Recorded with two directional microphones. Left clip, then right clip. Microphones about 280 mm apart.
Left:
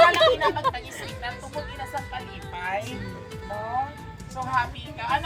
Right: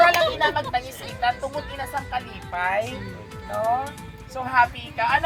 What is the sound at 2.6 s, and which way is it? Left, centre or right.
Speech, centre.